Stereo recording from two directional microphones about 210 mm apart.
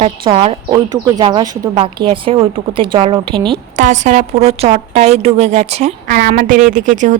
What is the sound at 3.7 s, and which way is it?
Speech, 35° right (ahead or behind).